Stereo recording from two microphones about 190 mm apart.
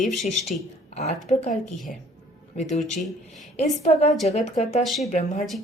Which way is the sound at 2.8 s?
Centre (ahead or behind).